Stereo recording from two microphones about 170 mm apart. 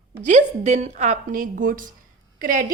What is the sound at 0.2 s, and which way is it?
A woman's voice, 45° right (ahead or behind).